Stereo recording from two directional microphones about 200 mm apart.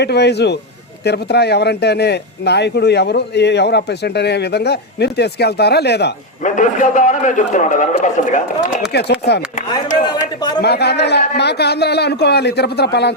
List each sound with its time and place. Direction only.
0.0 s speech: 55° left (ahead or behind)
6.4 s a man's voice: 40° left (ahead or behind)
8.9 s speech: 55° left (ahead or behind)
10.0 s a sound: 20° left (ahead or behind)
10.6 s speech: 55° left (ahead or behind)